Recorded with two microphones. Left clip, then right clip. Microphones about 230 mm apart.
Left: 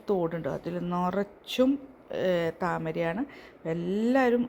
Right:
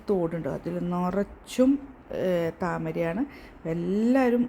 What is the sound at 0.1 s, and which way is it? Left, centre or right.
Speech, centre.